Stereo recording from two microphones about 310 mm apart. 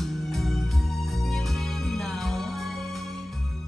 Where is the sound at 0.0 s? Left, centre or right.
Centre.